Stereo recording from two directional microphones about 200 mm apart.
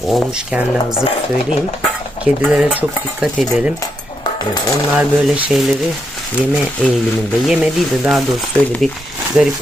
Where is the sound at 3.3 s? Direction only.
Centre (ahead or behind).